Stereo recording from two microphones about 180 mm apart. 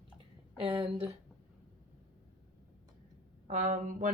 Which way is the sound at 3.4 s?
45° right (ahead or behind).